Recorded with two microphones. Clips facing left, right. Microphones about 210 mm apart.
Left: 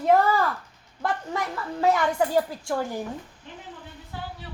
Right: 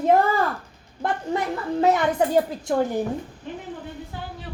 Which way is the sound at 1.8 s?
20° right (ahead or behind).